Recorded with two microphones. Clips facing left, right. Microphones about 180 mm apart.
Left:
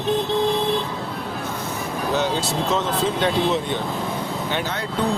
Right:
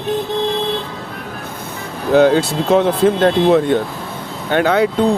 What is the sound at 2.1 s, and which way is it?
Speech, 60° right (ahead or behind).